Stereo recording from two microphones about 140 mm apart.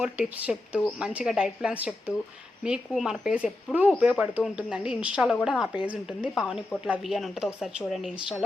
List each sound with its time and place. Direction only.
0.0 s speech: 10° right (ahead or behind)